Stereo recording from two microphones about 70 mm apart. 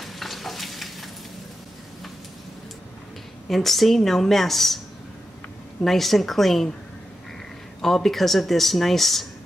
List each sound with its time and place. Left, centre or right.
0.0 s stir: centre
3.4 s speech: centre
5.9 s speech: centre
7.8 s speech: centre